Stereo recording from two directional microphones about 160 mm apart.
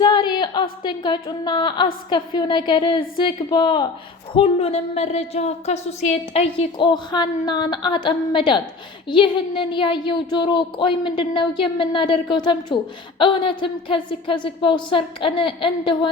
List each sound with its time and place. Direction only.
0.0 s a woman's voice: 25° left (ahead or behind)
4.4 s a woman's voice: 40° left (ahead or behind)